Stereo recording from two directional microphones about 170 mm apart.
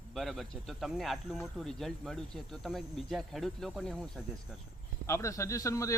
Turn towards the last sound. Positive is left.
turn(degrees=20)  # may be behind; listen again after turning